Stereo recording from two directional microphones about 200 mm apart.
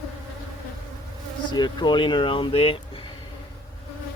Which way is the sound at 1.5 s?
20° left (ahead or behind).